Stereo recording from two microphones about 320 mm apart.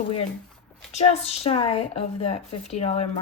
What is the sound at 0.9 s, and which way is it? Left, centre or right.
Speech, centre.